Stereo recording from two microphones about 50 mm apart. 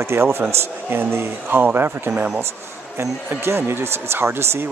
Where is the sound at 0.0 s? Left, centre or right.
Right.